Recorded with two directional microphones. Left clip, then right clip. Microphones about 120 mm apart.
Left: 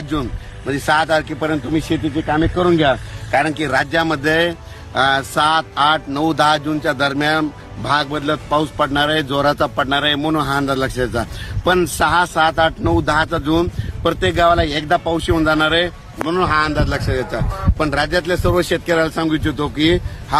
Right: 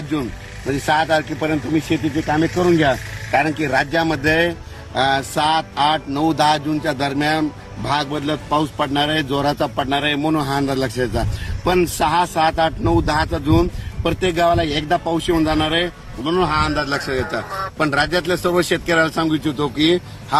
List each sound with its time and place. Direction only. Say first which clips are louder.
0.7 s a man's voice: left 1 dB; 25° right (ahead or behind); by 20.0 s centre (ahead or behind)